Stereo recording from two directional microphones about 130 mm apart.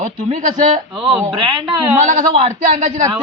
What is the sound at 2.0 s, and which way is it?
Speech, 70° right (ahead or behind).